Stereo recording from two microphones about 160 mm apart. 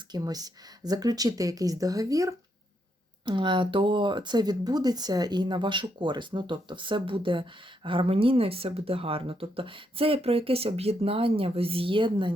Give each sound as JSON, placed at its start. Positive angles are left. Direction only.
{"t": 0.1, "sound": "speech", "side_deg": -25}